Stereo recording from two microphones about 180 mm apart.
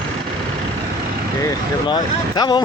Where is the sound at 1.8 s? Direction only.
25° left (ahead or behind).